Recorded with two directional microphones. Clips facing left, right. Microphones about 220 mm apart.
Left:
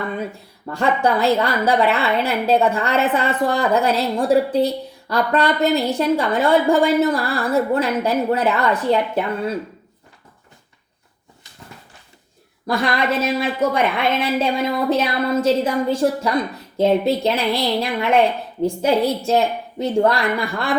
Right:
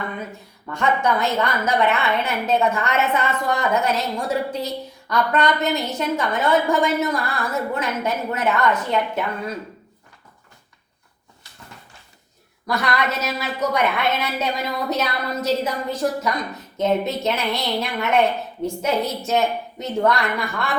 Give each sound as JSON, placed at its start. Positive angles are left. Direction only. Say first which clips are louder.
{"t": 0.7, "sound": "a woman's voice", "louder": "left 3 dB", "side_deg": 35}
{"t": 12.6, "sound": "a woman's voice", "louder": "left 3 dB", "side_deg": 30}